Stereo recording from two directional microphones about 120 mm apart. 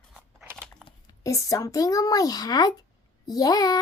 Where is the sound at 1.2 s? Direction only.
25° left (ahead or behind).